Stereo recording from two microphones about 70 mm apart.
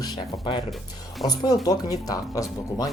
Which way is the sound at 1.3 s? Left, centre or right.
Left.